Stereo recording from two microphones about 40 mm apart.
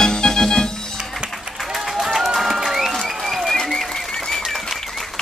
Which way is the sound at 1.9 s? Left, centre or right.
Centre.